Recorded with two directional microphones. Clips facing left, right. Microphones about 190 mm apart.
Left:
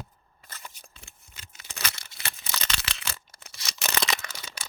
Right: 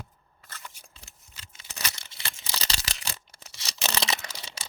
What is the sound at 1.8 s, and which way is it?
Tearing, 30° right (ahead or behind).